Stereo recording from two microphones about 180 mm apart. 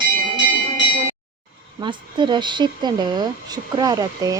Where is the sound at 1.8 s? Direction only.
25° right (ahead or behind).